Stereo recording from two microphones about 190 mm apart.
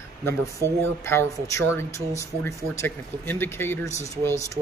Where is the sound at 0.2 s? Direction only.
15° left (ahead or behind).